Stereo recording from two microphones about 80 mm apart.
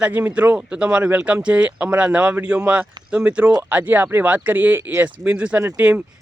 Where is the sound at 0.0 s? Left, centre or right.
Right.